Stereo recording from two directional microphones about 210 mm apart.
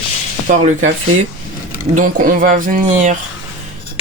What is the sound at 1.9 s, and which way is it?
Speech, 40° right (ahead or behind).